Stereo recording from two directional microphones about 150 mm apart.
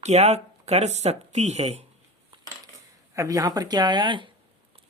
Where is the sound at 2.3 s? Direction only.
35° right (ahead or behind).